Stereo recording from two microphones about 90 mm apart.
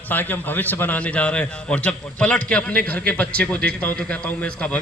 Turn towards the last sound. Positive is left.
turn(degrees=15)  # may be behind; listen again after turning